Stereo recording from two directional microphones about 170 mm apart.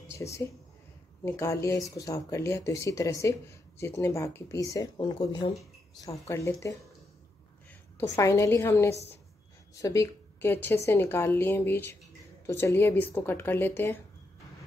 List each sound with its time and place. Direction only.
0.1 s speech: 15° left (ahead or behind)
8.0 s speech: 15° left (ahead or behind)